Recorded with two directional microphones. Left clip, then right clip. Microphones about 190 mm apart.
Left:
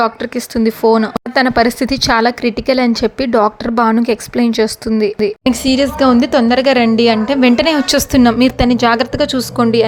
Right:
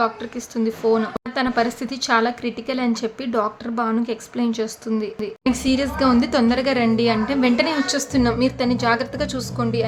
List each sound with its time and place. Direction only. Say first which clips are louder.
0.0 s speech: left 7 dB; 40° left (ahead or behind)